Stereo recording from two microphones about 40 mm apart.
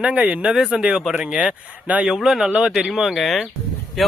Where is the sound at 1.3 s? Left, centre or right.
Right.